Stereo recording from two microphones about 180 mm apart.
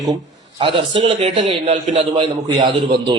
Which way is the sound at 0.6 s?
30° right (ahead or behind).